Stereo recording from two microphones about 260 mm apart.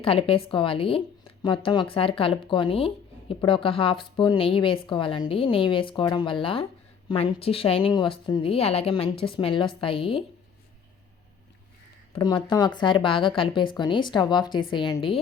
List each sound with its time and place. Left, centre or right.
0.0 s a woman's voice: left
12.1 s a woman's voice: centre